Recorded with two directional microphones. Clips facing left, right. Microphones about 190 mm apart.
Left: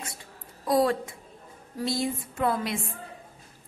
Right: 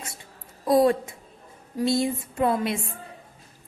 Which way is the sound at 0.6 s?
20° right (ahead or behind).